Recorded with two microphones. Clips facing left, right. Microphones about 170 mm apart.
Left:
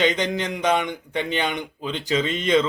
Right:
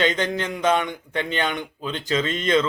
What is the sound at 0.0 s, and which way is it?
Speech, 15° left (ahead or behind).